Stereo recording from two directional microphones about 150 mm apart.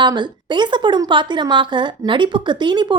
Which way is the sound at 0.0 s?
30° right (ahead or behind).